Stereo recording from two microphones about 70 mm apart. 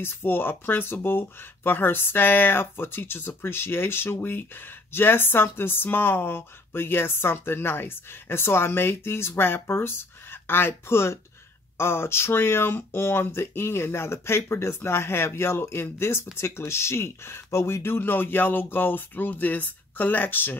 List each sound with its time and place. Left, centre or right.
0.0 s speech: left